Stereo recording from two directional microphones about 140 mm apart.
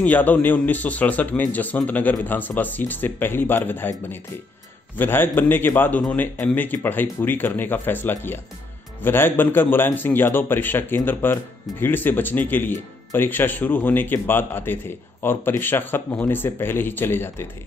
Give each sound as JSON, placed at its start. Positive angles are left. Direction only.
{"t": 0.0, "sound": "speech", "side_deg": 10}